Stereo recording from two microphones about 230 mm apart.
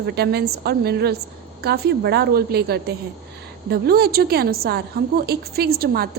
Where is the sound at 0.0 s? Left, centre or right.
Right.